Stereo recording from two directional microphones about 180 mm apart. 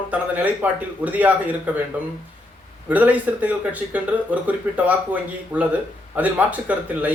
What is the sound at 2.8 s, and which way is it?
Speech, 10° right (ahead or behind).